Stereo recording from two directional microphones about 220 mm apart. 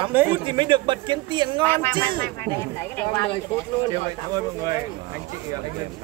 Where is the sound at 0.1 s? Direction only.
10° right (ahead or behind).